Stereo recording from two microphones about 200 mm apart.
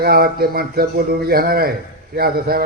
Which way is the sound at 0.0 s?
50° right (ahead or behind).